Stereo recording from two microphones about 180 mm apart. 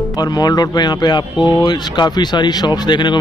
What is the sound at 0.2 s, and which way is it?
Speech, 20° left (ahead or behind).